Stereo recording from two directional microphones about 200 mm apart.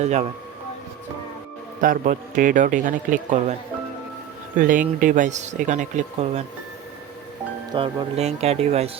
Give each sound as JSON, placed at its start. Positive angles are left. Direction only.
{"t": 0.0, "sound": "speech", "side_deg": -35}
{"t": 1.8, "sound": "speech", "side_deg": -45}
{"t": 4.5, "sound": "speech", "side_deg": -40}
{"t": 7.7, "sound": "speech", "side_deg": -25}